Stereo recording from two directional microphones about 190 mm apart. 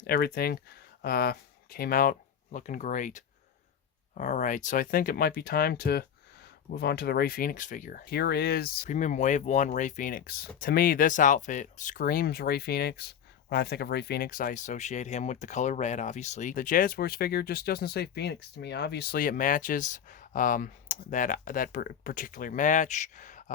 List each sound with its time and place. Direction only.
0.1 s speech: 55° left (ahead or behind)